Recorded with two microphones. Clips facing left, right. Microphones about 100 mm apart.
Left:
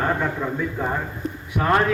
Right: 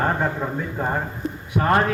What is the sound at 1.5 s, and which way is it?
Speech, 25° right (ahead or behind).